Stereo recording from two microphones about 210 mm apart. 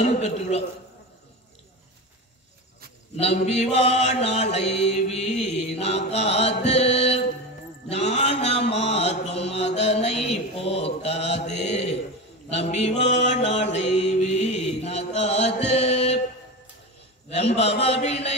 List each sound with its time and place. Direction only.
0.0 s mantra: 30° left (ahead or behind)
3.2 s mantra: 30° left (ahead or behind)
17.3 s mantra: 30° left (ahead or behind)